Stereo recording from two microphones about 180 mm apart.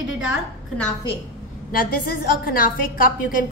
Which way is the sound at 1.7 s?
55° left (ahead or behind).